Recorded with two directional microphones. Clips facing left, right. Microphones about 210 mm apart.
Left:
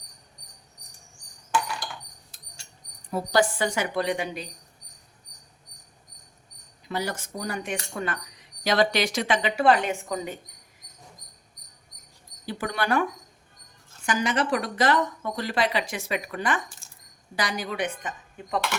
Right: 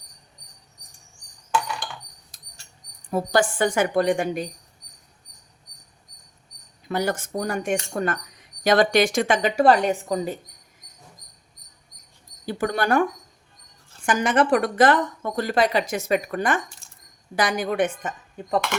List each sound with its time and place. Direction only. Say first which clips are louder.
3.1 s speech: right 2 dB; 50° right (ahead or behind)
6.8 s speech: right 6 dB; 50° right (ahead or behind); by 10.3 s 35° right (ahead or behind)
12.5 s speech: right 5 dB; 45° right (ahead or behind)
16.8 s a sound: even; centre (ahead or behind)
17.3 s speech: right 7 dB; 50° right (ahead or behind)
18.4 s speech: right 5 dB; 40° right (ahead or behind)